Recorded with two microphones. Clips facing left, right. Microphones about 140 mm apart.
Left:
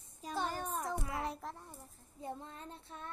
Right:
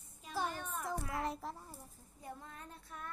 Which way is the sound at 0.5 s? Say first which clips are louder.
Left 4 dB; 35° left (ahead or behind).